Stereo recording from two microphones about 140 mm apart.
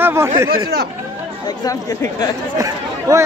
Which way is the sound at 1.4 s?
25° left (ahead or behind).